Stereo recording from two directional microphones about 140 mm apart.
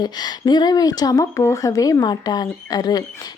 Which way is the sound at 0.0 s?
30° left (ahead or behind).